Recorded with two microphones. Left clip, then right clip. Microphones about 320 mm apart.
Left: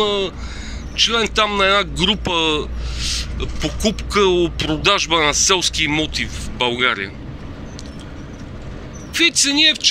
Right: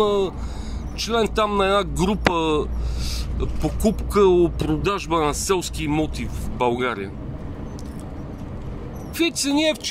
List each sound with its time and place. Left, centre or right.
0.0 s speech: centre
9.2 s speech: centre